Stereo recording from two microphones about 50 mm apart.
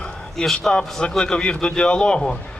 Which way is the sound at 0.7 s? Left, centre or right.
Centre.